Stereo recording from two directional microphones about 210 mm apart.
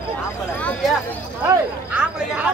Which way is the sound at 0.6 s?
5° left (ahead or behind).